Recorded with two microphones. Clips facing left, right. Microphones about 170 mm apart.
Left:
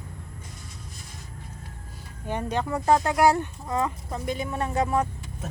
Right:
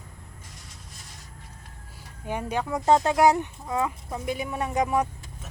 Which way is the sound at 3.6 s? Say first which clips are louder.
Even; 5° right (ahead or behind).